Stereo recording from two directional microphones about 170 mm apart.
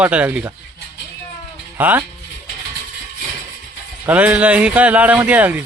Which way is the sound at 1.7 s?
10° right (ahead or behind).